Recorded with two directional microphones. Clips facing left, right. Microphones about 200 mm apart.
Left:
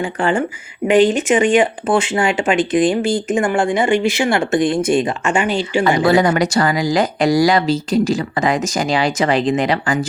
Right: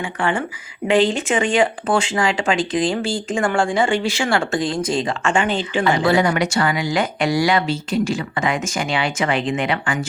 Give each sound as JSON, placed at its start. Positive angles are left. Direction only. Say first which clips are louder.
{"t": 0.0, "sound": "speech", "louder": "left 4 dB", "side_deg": 30}
{"t": 0.9, "sound": "speech", "louder": "left 4 dB", "side_deg": 20}
{"t": 6.0, "sound": "speech", "louder": "left 4 dB", "side_deg": 40}